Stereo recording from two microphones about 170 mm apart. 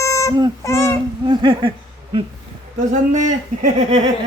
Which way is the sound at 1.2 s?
30° right (ahead or behind).